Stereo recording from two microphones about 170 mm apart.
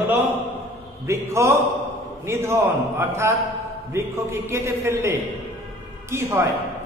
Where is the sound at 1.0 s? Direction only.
15° right (ahead or behind).